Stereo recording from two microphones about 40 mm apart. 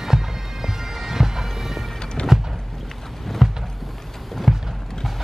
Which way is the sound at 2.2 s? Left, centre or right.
Left.